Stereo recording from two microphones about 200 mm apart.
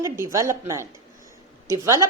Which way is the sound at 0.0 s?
15° right (ahead or behind).